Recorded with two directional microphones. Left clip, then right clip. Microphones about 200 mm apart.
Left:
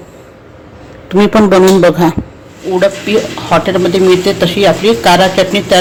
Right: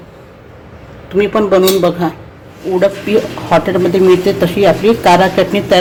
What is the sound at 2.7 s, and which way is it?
Speech, centre (ahead or behind).